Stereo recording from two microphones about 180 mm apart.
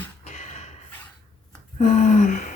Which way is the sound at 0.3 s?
40° left (ahead or behind).